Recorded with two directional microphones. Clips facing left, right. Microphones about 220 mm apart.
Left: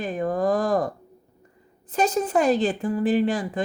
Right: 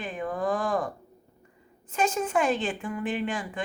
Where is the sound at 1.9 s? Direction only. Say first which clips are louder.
Left 4 dB; 35° left (ahead or behind).